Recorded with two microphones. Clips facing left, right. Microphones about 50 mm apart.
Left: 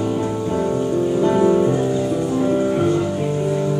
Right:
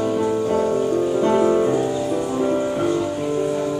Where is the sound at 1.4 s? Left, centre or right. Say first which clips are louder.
Left 2 dB; centre.